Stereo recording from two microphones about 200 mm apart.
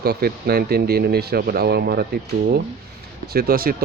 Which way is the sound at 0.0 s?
50° right (ahead or behind).